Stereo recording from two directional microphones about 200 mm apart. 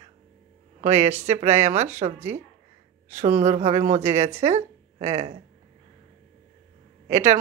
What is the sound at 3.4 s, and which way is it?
A woman's voice, 35° right (ahead or behind).